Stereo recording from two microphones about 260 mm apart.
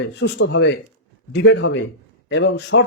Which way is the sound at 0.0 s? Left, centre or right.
Left.